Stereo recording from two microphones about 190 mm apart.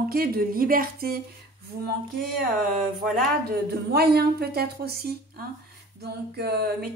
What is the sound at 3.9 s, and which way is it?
A woman's voice, 55° right (ahead or behind).